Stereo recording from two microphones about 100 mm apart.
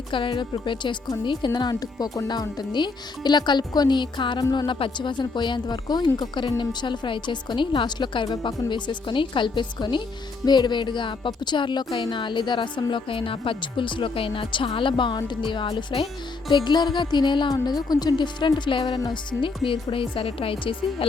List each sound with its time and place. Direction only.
0.1 s a woman's voice: 55° left (ahead or behind)
19.6 s a woman's voice: 60° left (ahead or behind)